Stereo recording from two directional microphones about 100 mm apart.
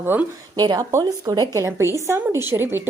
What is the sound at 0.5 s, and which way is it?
Speech, 45° right (ahead or behind).